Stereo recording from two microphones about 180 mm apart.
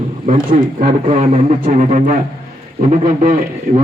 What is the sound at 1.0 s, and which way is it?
Speech, 35° right (ahead or behind).